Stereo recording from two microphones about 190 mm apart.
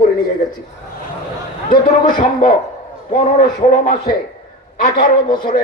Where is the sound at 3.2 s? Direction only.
35° left (ahead or behind).